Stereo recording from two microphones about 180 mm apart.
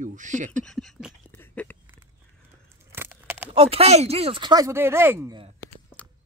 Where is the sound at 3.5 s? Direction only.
30° right (ahead or behind); by 5.3 s 15° right (ahead or behind).